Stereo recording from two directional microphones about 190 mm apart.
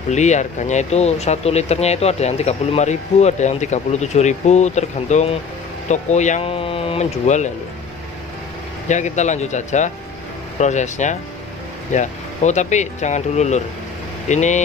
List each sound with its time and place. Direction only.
0.1 s speech: 35° left (ahead or behind)
8.8 s speech: 40° left (ahead or behind)